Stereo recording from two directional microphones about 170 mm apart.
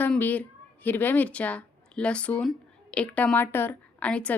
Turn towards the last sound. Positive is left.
turn(degrees=5)  # may be behind; listen again after turning